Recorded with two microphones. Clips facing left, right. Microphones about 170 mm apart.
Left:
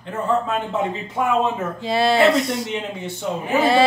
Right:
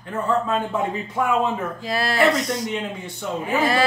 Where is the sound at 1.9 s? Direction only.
25° left (ahead or behind).